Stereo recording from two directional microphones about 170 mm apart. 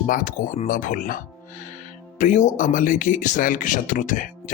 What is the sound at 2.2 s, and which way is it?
Speech, 45° left (ahead or behind).